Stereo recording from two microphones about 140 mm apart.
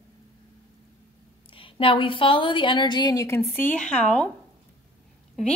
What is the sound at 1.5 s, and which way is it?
A woman's voice, 40° left (ahead or behind).